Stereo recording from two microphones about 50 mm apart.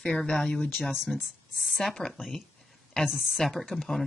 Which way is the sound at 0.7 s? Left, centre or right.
Centre.